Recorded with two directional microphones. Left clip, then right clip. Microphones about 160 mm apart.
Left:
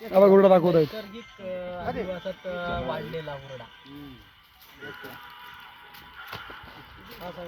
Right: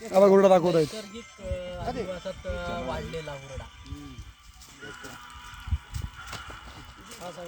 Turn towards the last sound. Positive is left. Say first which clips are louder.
# left 1 dB
turn(degrees=40)  # may be behind; listen again after turning